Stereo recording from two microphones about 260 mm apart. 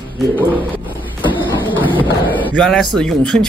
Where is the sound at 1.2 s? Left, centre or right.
Centre.